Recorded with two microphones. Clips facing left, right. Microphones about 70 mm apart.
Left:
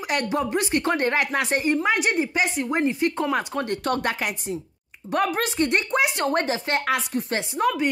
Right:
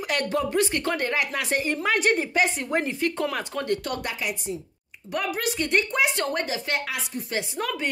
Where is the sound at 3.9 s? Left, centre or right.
Left.